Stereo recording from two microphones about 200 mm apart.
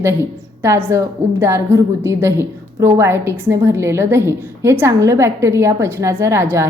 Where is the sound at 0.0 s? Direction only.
10° right (ahead or behind).